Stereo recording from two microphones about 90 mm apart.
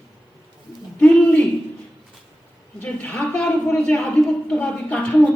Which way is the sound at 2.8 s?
10° left (ahead or behind).